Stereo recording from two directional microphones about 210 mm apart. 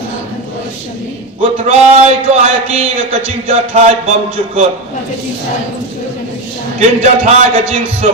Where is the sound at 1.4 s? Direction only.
25° right (ahead or behind).